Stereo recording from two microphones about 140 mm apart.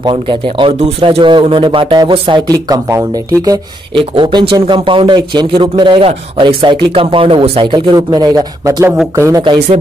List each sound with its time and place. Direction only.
0.0 s speech: 35° right (ahead or behind)
4.0 s speech: 35° right (ahead or behind)
9.4 s speech: 35° right (ahead or behind)